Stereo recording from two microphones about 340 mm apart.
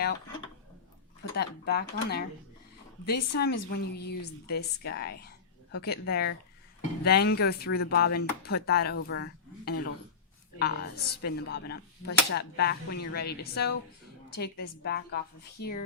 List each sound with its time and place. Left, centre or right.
1.2 s speech: left
14.8 s speech: left